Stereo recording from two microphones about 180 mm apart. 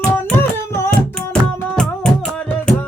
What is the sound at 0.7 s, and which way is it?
Music, 15° left (ahead or behind).